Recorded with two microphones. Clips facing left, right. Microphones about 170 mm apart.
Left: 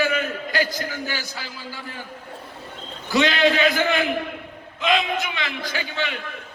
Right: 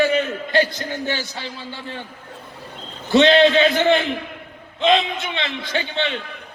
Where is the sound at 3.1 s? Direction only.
25° right (ahead or behind).